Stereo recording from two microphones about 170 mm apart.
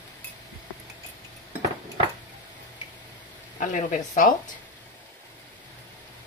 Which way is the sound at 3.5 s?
45° left (ahead or behind).